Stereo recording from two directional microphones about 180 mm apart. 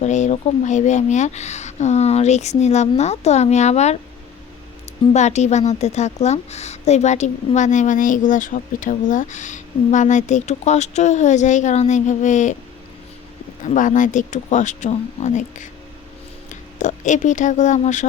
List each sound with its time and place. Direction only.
0.0 s a woman's voice: 40° left (ahead or behind)
5.1 s a woman's voice: 40° left (ahead or behind)
13.7 s speech: 45° left (ahead or behind)
16.7 s speech: 45° left (ahead or behind)